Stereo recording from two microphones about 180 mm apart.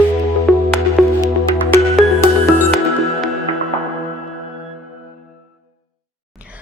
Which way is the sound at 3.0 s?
Centre (ahead or behind).